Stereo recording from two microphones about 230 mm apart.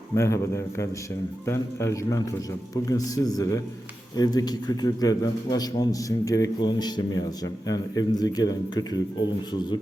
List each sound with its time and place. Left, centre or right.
0.2 s a man's voice: centre